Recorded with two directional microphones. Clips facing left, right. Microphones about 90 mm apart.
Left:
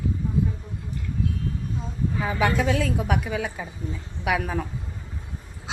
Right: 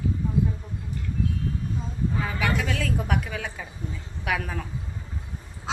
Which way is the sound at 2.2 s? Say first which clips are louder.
Left 8 dB; 25° left (ahead or behind).